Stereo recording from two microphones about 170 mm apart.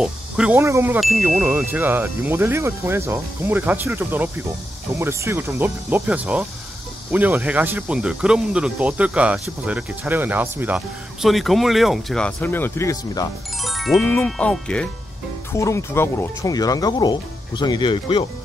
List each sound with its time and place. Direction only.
0.0 s snake: 5° right (ahead or behind)
0.6 s speech: 15° right (ahead or behind); by 13.3 s 20° left (ahead or behind)
13.6 s music: centre (ahead or behind)
13.9 s speech: 10° left (ahead or behind)
15.5 s speech: 15° left (ahead or behind)